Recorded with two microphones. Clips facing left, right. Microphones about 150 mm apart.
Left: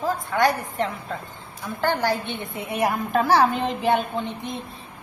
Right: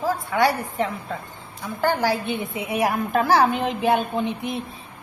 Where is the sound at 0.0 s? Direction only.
10° right (ahead or behind).